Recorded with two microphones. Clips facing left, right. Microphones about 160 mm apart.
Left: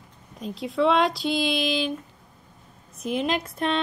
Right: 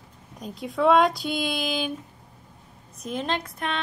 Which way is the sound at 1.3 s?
50° right (ahead or behind).